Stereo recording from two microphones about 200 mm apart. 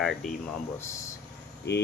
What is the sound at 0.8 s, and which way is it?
Speech, 15° left (ahead or behind).